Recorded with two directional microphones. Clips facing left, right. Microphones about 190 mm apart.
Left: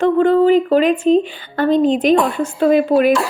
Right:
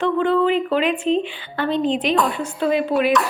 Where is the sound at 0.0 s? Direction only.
45° left (ahead or behind).